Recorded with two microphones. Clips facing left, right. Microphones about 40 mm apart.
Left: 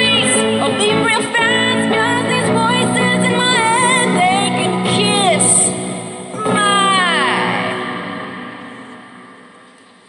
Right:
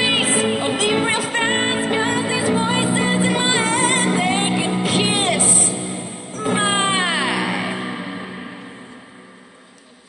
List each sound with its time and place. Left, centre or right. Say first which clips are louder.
0.0 s music: left 4 dB; left